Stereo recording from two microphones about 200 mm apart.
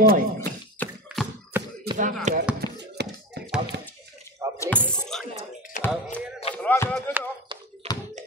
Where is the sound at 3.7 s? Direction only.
60° right (ahead or behind).